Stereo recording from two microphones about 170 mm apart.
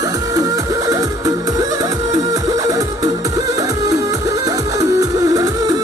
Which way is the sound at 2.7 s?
20° right (ahead or behind).